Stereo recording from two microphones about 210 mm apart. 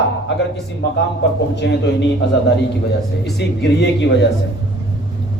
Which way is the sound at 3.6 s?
55° left (ahead or behind).